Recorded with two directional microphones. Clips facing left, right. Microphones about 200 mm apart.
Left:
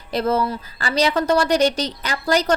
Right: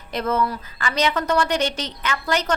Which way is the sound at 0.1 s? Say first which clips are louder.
Left 2 dB; 30° left (ahead or behind).